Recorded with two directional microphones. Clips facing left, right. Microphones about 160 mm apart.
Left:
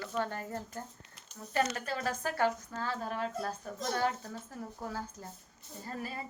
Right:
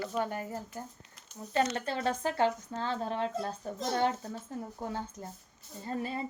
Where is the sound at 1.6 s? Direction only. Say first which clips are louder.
Right 2 dB; 25° right (ahead or behind).